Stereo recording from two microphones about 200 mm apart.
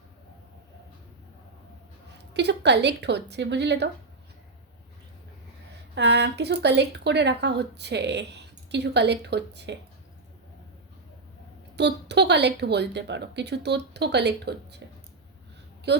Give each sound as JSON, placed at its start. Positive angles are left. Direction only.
{"t": 2.3, "sound": "speech", "side_deg": -60}
{"t": 5.9, "sound": "speech", "side_deg": -60}
{"t": 11.8, "sound": "speech", "side_deg": -60}
{"t": 15.9, "sound": "a woman's voice", "side_deg": -60}